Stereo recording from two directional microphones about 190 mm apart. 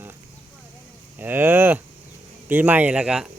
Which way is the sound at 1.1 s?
10° right (ahead or behind).